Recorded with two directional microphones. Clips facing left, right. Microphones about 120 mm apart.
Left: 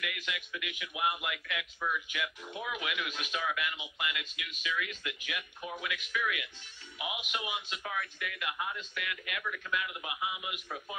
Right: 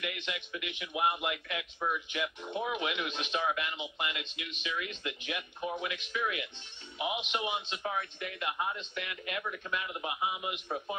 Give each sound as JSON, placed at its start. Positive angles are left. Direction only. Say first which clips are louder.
{"t": 0.0, "sound": "a man's voice", "louder": "right 1 dB", "side_deg": -25}